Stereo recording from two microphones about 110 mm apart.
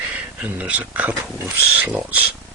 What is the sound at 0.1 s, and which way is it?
Speech, 15° right (ahead or behind).